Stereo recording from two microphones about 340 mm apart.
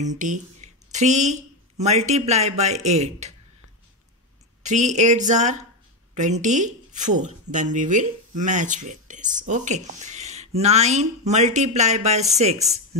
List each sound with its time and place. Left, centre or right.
0.0 s speech: right
4.6 s speech: right